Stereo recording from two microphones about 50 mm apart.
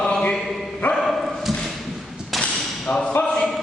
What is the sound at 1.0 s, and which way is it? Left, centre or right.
Dog, centre.